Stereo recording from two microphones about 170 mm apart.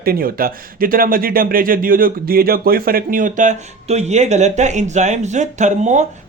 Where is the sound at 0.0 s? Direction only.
60° right (ahead or behind).